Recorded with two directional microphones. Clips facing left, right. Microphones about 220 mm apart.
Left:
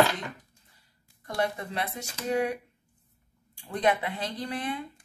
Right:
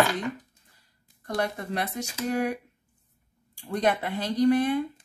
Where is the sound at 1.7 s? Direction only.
45° right (ahead or behind).